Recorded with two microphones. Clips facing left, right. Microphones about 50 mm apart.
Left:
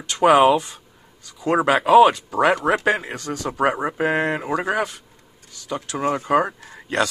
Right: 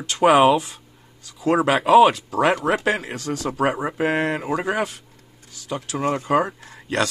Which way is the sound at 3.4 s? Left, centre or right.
Centre.